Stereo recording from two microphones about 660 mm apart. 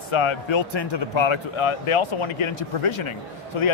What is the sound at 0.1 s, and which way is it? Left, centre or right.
Speech, left.